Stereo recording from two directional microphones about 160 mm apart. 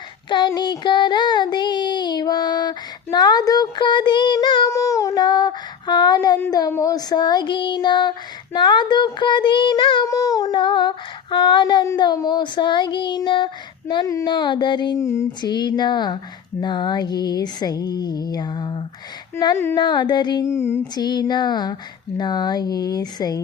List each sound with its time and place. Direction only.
0.3 s child singing: 30° left (ahead or behind)
20.5 s music: 15° left (ahead or behind)
20.9 s child singing: 25° left (ahead or behind)